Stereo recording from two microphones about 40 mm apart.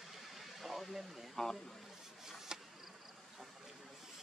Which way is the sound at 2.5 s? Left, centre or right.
Centre.